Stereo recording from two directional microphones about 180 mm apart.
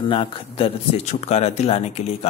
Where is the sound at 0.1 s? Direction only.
30° left (ahead or behind).